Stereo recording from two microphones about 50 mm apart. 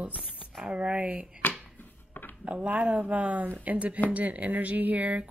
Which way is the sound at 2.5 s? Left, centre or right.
Right.